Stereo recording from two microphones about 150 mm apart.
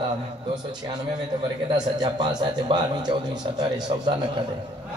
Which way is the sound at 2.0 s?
30° right (ahead or behind).